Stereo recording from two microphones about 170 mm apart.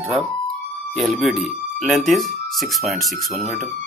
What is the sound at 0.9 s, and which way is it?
Speech, centre (ahead or behind).